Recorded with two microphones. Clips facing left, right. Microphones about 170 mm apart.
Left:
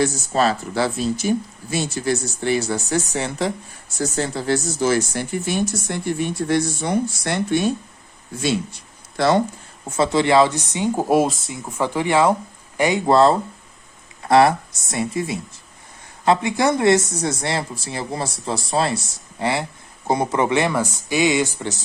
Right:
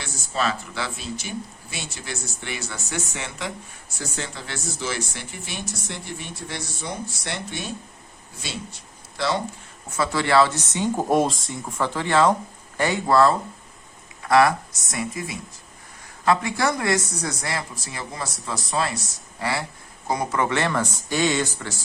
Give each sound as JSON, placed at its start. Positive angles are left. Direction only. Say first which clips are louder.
{"t": 0.0, "sound": "speech", "louder": "left 8 dB", "side_deg": 40}
{"t": 9.1, "sound": "speech", "louder": "left 7 dB", "side_deg": 50}
{"t": 10.0, "sound": "speech", "louder": "left 4 dB", "side_deg": 20}